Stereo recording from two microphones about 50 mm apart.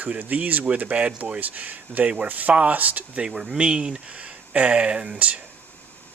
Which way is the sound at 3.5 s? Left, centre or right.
Right.